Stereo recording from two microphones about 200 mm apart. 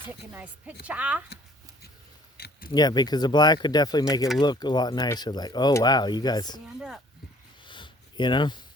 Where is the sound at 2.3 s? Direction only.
55° left (ahead or behind).